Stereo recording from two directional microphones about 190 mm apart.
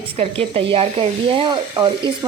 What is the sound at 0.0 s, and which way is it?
A woman's voice, 30° right (ahead or behind).